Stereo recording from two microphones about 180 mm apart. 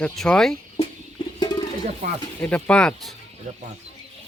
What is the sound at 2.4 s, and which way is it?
Speech, 10° left (ahead or behind).